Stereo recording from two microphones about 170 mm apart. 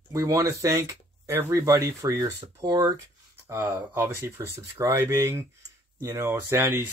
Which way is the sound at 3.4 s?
15° right (ahead or behind).